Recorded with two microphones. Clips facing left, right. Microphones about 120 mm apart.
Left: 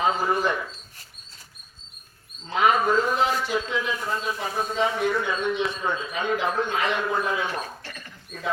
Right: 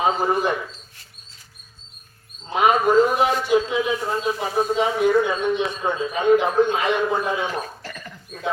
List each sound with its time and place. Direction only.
0.0 s a man's voice: 15° right (ahead or behind)
2.5 s a man's voice: 15° right (ahead or behind)